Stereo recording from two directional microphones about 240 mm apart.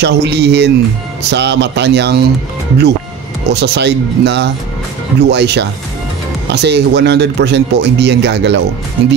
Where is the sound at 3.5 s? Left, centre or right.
Right.